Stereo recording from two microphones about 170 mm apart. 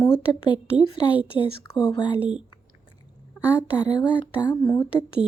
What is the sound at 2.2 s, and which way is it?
Speech, 5° right (ahead or behind).